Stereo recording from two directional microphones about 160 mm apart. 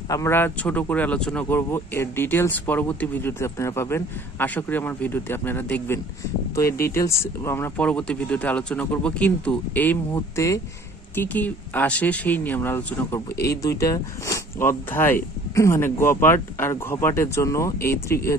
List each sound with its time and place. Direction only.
0.1 s speech: 15° left (ahead or behind)